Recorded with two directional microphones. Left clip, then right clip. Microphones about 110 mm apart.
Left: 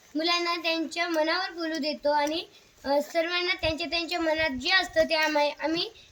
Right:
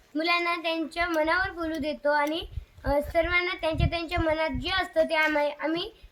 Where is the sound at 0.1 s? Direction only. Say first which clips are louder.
Right 1 dB; 25° left (ahead or behind).